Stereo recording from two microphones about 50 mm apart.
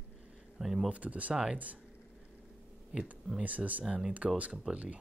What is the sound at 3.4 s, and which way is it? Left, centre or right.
Speech, right.